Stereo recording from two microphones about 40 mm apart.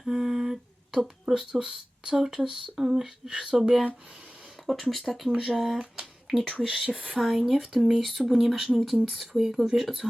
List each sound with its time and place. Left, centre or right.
0.0 s humming: centre
1.3 s speech: centre
2.8 s whispering: centre
3.2 s speech: right
3.6 s speech: centre
6.8 s speech: right
7.1 s speech: centre